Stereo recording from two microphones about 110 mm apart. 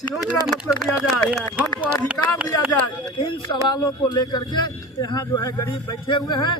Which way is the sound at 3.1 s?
50° left (ahead or behind).